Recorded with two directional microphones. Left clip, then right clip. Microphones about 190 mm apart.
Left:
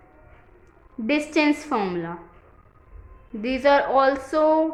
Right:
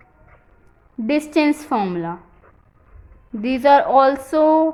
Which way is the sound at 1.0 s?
30° right (ahead or behind).